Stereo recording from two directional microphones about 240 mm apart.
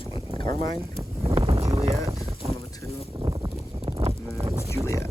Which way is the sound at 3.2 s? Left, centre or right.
Centre.